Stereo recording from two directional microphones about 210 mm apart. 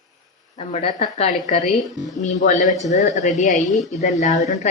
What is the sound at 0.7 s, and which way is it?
Speech, 30° left (ahead or behind).